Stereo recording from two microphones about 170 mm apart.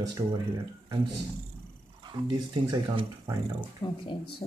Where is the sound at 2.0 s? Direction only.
30° right (ahead or behind).